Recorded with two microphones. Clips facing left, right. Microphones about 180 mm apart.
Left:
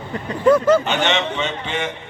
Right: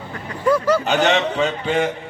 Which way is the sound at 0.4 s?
20° left (ahead or behind).